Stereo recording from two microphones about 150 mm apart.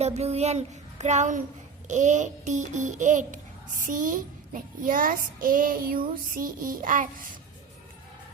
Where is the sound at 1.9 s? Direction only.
55° right (ahead or behind).